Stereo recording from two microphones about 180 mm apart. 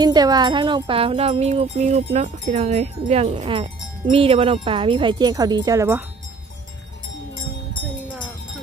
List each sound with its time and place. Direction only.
0.0 s speech: 20° right (ahead or behind)